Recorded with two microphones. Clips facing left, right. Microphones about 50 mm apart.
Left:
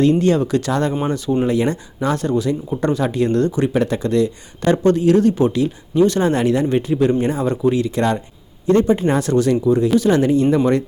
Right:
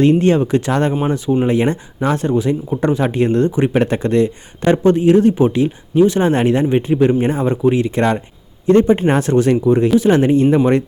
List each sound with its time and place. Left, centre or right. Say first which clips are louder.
0.0 s speech: right 2 dB; right
0.9 s speech: right 2 dB; centre
1.5 s speech: right 2 dB; right
3.8 s speech: right 2 dB; right
4.6 s speech: right 2 dB; right